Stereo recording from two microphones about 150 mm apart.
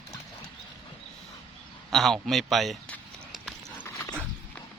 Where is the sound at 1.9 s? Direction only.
Centre (ahead or behind).